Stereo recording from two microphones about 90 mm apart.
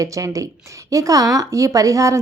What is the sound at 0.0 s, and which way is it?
A woman's voice, 35° right (ahead or behind).